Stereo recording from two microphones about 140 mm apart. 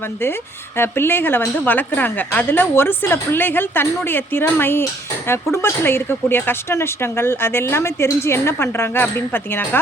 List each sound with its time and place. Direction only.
0.8 s a woman's voice: 15° left (ahead or behind)